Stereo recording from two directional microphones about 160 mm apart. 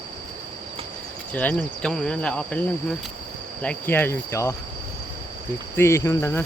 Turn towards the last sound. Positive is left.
turn(degrees=15)  # may be behind; listen again after turning